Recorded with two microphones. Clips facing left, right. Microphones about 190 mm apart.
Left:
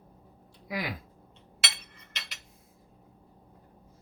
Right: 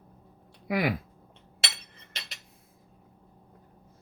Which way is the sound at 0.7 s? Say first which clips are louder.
Right 8 dB; 60° right (ahead or behind).